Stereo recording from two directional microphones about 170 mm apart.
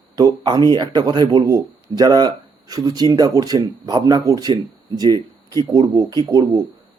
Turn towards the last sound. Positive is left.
turn(degrees=-25)  # may be behind; listen again after turning